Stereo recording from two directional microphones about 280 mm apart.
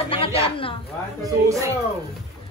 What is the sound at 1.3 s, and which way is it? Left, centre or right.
Speech, centre.